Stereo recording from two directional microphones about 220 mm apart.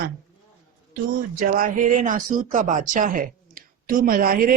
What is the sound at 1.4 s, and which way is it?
Speech, 40° right (ahead or behind).